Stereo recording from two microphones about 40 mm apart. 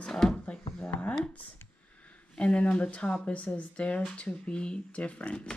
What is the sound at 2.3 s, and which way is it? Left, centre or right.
Speech, left.